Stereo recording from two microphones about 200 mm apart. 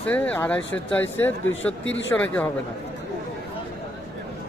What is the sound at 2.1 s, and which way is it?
Speech, 5° left (ahead or behind).